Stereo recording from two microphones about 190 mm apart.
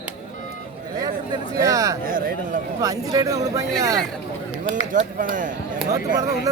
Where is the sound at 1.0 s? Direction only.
20° right (ahead or behind).